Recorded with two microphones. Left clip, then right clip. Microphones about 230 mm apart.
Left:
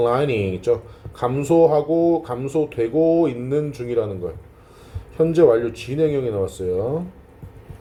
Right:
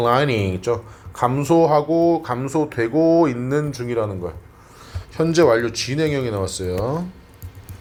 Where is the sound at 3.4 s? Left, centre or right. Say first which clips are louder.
Even; right.